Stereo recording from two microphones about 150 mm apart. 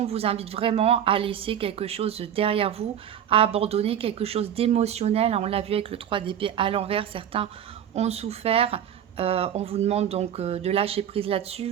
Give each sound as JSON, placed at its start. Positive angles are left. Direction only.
{"t": 0.0, "sound": "speech", "side_deg": -40}